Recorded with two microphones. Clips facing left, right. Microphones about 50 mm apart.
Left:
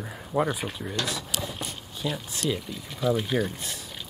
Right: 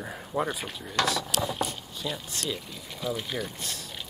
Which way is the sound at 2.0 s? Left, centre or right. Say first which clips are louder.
Left 4 dB; centre.